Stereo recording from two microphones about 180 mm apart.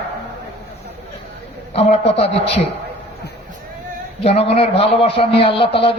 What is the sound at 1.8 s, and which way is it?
Speech, 35° left (ahead or behind).